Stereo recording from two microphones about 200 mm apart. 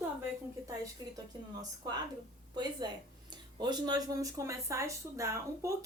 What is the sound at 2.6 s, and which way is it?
Speech, 20° right (ahead or behind).